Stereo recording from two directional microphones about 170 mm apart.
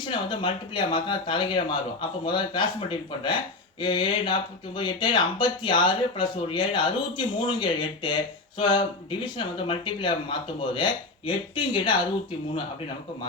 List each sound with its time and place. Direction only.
0.1 s speech: 30° left (ahead or behind)
3.8 s speech: 25° left (ahead or behind)